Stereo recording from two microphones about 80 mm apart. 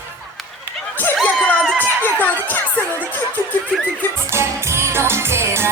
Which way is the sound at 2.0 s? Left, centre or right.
Left.